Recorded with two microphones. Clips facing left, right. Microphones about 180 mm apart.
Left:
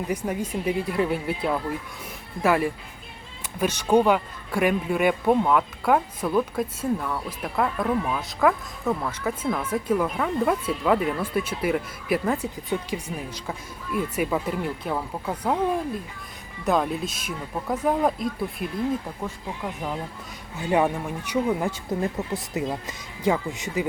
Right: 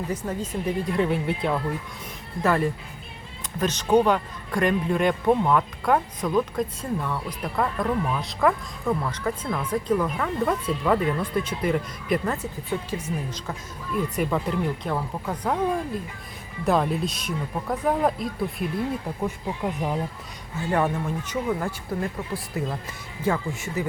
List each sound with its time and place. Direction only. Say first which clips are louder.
0.1 s a man's voice: left 2 dB; 10° left (ahead or behind)
19.2 s speech: right 4 dB; 15° right (ahead or behind)
20.6 s speech: left 2 dB; 15° left (ahead or behind)